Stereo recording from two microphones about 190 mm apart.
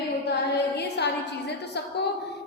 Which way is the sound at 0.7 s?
60° left (ahead or behind).